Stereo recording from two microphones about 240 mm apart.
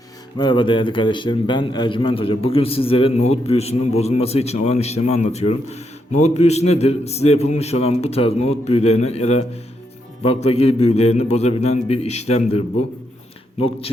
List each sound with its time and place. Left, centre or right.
0.3 s a man's voice: centre